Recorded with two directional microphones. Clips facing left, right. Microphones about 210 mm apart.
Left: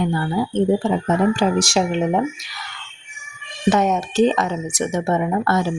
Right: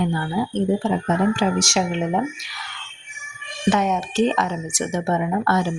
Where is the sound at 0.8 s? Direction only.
40° left (ahead or behind).